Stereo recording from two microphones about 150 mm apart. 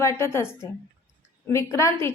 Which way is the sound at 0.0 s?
20° left (ahead or behind).